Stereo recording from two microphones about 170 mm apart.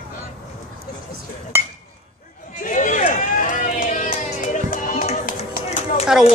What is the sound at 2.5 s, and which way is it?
Run, 50° left (ahead or behind).